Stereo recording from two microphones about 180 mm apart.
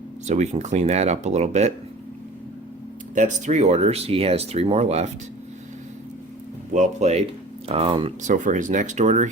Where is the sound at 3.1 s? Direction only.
40° right (ahead or behind).